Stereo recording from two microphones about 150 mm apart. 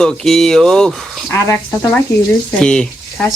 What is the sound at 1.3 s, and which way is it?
Speech, 20° left (ahead or behind).